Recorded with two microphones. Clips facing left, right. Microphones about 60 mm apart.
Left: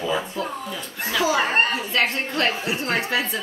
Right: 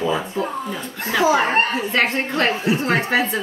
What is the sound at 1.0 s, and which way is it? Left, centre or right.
A woman's voice, right.